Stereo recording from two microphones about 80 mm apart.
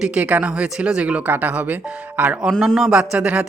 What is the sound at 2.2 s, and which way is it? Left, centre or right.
Music, centre.